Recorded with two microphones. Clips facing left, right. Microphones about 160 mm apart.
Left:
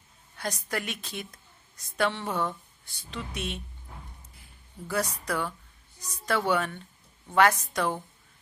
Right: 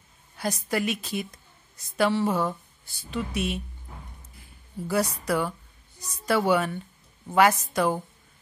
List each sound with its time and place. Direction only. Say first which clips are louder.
0.4 s speech: right 6 dB; 5° right (ahead or behind)
4.8 s a woman's voice: right 4 dB; 10° right (ahead or behind)